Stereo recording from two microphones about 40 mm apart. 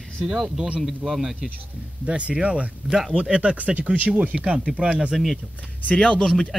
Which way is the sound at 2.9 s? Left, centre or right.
Centre.